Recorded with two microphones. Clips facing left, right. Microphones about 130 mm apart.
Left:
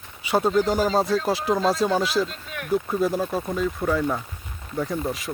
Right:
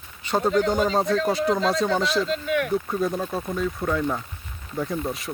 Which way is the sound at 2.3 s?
90° right.